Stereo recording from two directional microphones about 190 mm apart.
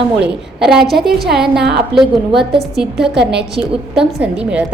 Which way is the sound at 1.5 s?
60° right (ahead or behind).